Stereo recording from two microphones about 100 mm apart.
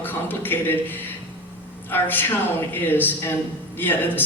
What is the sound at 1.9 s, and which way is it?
A man's voice, 20° left (ahead or behind).